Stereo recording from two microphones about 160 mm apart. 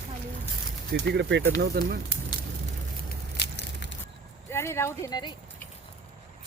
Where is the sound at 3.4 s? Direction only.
90° left.